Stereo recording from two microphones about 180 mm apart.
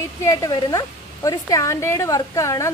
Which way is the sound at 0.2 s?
20° left (ahead or behind).